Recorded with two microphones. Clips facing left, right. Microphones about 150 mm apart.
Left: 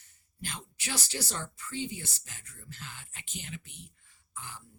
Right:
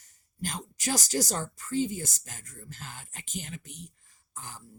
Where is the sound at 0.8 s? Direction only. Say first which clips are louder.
Right 8 dB; 40° right (ahead or behind).